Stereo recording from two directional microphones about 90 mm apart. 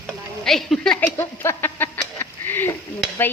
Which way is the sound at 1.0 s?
30° left (ahead or behind).